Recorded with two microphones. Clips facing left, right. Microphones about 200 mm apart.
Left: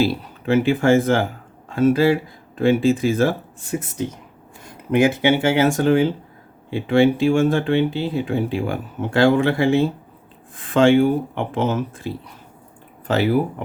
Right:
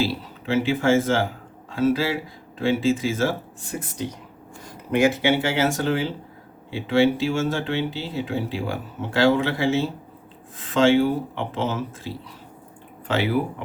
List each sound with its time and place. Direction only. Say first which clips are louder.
0.0 s speech: left 5 dB; 55° left (ahead or behind)
4.9 s speech: left 3 dB; 55° left (ahead or behind)